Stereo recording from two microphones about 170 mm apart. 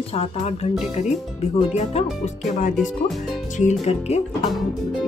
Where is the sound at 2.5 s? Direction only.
45° left (ahead or behind).